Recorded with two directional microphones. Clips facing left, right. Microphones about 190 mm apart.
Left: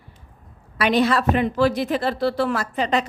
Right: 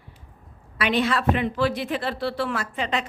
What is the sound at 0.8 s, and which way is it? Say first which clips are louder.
A woman's voice: left 4 dB; 40° left (ahead or behind).